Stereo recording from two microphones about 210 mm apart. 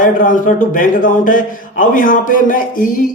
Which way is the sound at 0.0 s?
40° left (ahead or behind).